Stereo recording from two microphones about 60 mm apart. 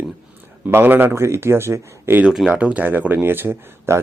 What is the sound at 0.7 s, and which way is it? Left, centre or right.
Speech, right.